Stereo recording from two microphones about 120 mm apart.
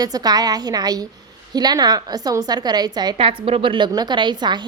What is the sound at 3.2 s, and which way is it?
A woman's voice, 50° right (ahead or behind).